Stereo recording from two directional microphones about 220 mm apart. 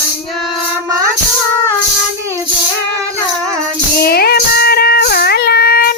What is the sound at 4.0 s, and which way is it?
Music, 45° left (ahead or behind).